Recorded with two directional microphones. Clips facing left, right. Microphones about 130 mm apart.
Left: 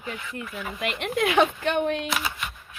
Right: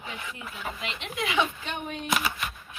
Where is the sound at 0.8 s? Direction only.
55° left (ahead or behind).